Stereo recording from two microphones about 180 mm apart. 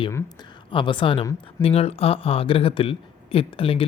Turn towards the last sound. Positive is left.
turn(degrees=30)  # may be behind; listen again after turning